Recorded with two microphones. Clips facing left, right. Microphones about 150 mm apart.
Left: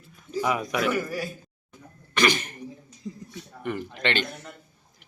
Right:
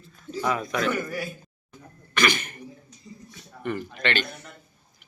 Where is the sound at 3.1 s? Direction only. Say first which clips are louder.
Left 8 dB; 90° left.